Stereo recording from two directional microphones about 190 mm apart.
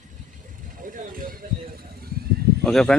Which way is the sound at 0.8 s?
45° right (ahead or behind).